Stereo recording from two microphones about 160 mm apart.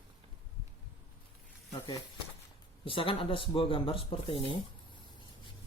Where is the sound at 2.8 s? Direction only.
35° left (ahead or behind).